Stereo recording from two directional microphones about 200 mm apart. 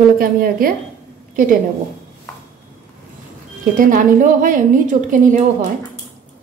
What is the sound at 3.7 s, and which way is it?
A woman's voice, 40° right (ahead or behind).